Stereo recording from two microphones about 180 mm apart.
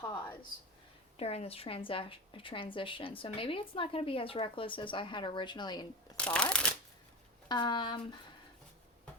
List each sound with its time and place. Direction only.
1.1 s a woman's voice: 35° left (ahead or behind)
6.1 s speech: 5° left (ahead or behind)
7.4 s speech: 25° left (ahead or behind)